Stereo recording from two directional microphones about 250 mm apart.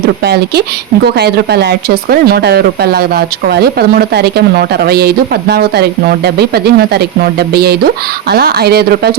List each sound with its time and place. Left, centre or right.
0.3 s speech: right